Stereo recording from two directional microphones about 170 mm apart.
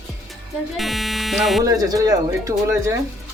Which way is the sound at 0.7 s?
Centre (ahead or behind).